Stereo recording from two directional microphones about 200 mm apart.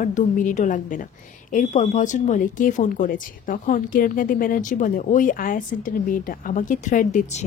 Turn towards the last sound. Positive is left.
turn(degrees=40)  # may be behind; listen again after turning